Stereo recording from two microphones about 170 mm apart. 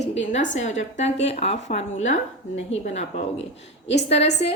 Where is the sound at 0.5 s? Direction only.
45° left (ahead or behind).